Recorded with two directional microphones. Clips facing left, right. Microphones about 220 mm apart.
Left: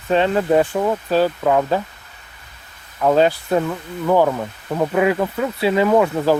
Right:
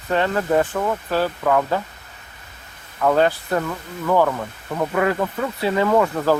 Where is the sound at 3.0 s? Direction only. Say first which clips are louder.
Left 2 dB; 15° left (ahead or behind).